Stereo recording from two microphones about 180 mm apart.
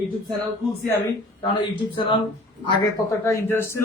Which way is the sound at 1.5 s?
30° left (ahead or behind).